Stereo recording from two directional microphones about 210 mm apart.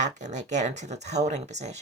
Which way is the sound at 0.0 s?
35° right (ahead or behind).